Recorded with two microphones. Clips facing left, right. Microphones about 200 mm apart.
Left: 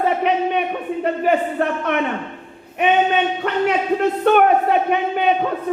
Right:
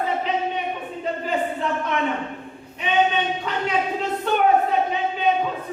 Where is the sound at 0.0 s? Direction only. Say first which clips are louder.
Left 6 dB; 65° left (ahead or behind).